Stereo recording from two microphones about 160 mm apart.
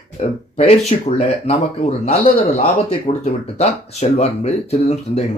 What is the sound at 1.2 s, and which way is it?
Speech, 45° left (ahead or behind).